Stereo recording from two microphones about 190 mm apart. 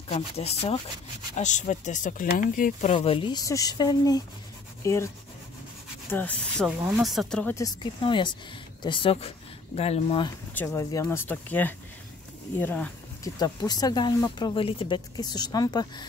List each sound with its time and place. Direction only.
0.1 s speech: 30° left (ahead or behind); by 7.5 s 5° left (ahead or behind)
7.5 s speech: 20° left (ahead or behind)
10.5 s speech: 10° left (ahead or behind)
13.2 s speech: 20° left (ahead or behind)